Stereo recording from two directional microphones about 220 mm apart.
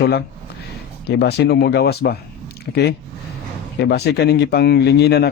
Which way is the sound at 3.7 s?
50° left (ahead or behind).